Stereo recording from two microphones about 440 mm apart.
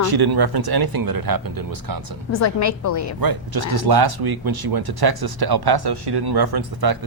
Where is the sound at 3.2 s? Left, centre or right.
Right.